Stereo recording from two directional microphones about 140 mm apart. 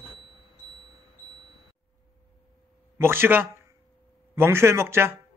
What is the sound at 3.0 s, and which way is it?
Speech, 15° right (ahead or behind).